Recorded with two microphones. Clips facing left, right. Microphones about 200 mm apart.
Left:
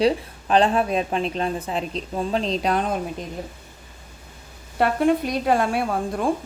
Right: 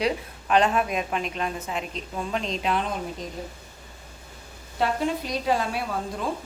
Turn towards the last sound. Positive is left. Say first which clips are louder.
# left 6 dB
turn(degrees=55)  # may be behind; listen again after turning